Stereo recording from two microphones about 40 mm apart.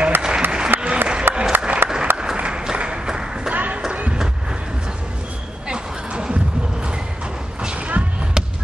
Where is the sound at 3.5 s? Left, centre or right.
Right.